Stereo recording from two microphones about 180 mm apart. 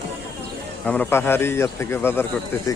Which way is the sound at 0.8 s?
10° left (ahead or behind).